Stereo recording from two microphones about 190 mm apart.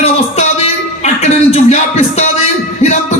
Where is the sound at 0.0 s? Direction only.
35° left (ahead or behind).